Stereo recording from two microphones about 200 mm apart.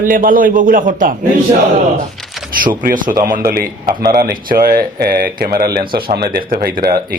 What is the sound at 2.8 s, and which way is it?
Speech, 45° right (ahead or behind).